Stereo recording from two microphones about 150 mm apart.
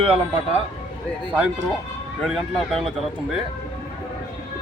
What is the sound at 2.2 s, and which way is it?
Speech, centre (ahead or behind).